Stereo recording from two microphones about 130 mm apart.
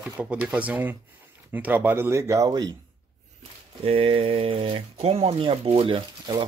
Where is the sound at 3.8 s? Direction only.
45° right (ahead or behind).